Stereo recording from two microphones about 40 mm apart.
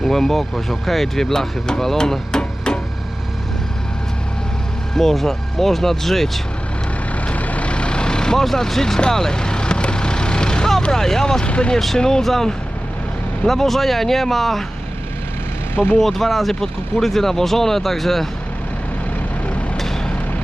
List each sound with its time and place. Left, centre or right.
0.1 s speech: centre
4.9 s speech: centre
7.3 s vehicle: left; by 8.4 s centre
8.4 s speech: centre
9.0 s vehicle: centre
10.9 s speech: centre
11.4 s speech: left
11.9 s speech: centre
13.5 s speech: centre
15.7 s speech: left
16.0 s speech: centre
19.7 s vehicle: centre